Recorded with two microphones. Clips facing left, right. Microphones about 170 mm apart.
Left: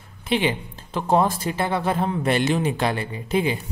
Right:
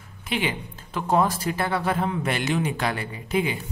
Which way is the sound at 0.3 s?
30° left (ahead or behind).